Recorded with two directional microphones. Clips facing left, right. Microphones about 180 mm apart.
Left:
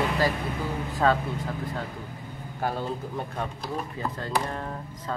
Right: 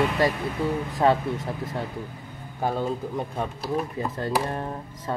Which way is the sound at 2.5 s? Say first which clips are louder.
Right 3 dB; 15° right (ahead or behind).